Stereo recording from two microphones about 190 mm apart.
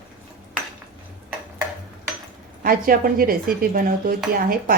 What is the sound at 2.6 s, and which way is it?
Dishes, 50° right (ahead or behind).